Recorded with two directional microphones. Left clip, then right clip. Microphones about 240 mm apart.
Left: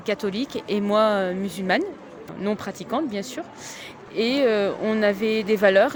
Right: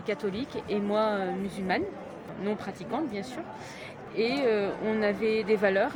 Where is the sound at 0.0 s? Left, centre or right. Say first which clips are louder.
Left 6 dB; left.